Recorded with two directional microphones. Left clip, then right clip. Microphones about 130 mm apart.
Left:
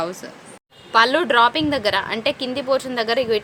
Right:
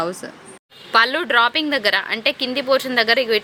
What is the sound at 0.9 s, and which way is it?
Speech, 20° right (ahead or behind).